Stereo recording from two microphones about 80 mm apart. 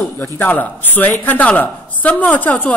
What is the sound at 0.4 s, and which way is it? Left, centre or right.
A woman's voice, left.